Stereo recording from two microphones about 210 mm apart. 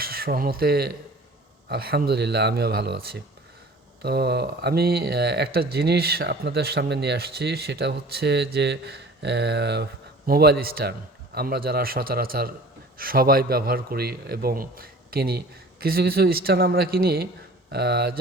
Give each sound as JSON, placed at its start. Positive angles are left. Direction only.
{"t": 0.0, "sound": "speech", "side_deg": -45}